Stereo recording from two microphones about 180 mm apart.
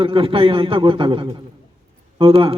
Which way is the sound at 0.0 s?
30° right (ahead or behind).